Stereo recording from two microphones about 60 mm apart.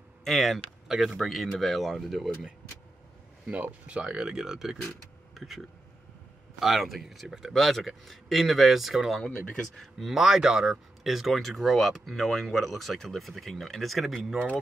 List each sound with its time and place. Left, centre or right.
0.2 s speech: centre
3.8 s speech: right; by 14.4 s centre